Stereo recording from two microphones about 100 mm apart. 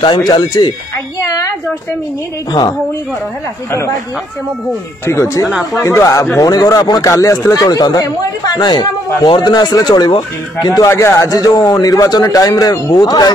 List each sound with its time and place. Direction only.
0.3 s speech: 40° left (ahead or behind)
1.2 s speech: 30° left (ahead or behind)
5.0 s speech: 30° left (ahead or behind)
5.5 s speech: centre (ahead or behind)
5.8 s speech: 30° left (ahead or behind)
10.8 s speech: 30° left (ahead or behind)